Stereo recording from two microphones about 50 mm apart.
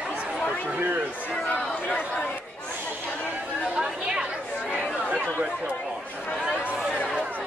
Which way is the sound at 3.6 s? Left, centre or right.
Centre.